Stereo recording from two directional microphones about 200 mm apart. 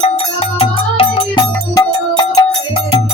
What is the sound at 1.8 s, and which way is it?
Music, 20° left (ahead or behind).